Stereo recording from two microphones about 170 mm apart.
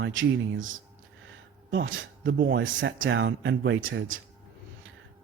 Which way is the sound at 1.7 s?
90° right.